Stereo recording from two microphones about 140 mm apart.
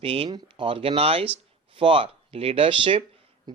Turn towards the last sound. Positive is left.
turn(degrees=-45)  # may be behind; listen again after turning